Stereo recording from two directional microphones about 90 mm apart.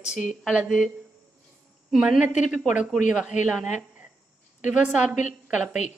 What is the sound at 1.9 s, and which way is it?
A woman's voice, 5° right (ahead or behind).